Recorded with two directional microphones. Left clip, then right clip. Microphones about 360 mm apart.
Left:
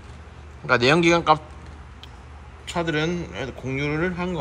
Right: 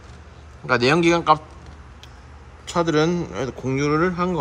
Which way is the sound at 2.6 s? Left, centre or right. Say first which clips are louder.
Right 5 dB; centre.